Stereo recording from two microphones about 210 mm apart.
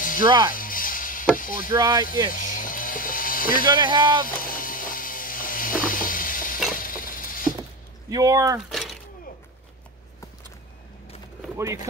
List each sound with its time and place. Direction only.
0.0 s music: 40° left (ahead or behind)
0.5 s snake: 40° left (ahead or behind)
1.3 s chop: 40° left (ahead or behind)
1.7 s speech: 20° right (ahead or behind)
2.3 s mechanisms: 40° left (ahead or behind)
3.6 s speech: 20° right (ahead or behind)
4.4 s vehicle: 40° left (ahead or behind)
6.7 s a sound: 40° left (ahead or behind)
8.1 s speech: 15° right (ahead or behind)
8.5 s a sound: centre (ahead or behind)
11.5 s speech: 15° right (ahead or behind)